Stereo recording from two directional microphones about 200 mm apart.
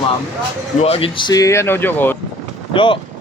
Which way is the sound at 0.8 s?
30° left (ahead or behind).